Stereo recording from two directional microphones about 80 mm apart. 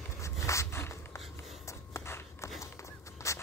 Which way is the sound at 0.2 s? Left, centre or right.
Left.